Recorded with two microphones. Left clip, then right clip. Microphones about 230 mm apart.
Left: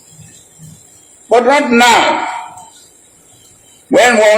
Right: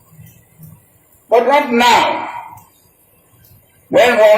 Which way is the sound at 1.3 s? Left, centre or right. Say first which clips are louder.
Left 2 dB; left.